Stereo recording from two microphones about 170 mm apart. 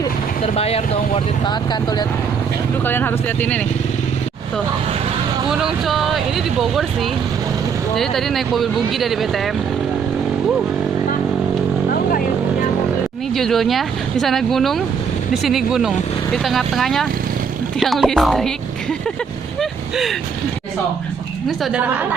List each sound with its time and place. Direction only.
0.4 s speech: 35° left (ahead or behind)
2.8 s speech: 10° left (ahead or behind)
5.5 s speech: centre (ahead or behind)
13.3 s speech: centre (ahead or behind)
19.5 s a sound: centre (ahead or behind)
21.4 s a woman's voice: 5° right (ahead or behind)